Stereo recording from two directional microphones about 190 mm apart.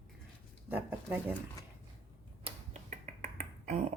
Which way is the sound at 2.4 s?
35° right (ahead or behind).